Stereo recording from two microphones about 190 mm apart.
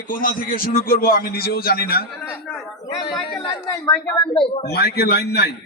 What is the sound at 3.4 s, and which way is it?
Speech, 25° left (ahead or behind).